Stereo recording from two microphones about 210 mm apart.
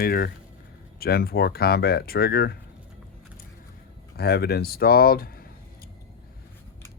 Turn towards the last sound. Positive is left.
turn(degrees=45)  # may be behind; listen again after turning